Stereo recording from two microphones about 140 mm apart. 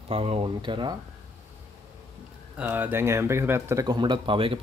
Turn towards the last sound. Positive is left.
turn(degrees=-40)  # may be behind; listen again after turning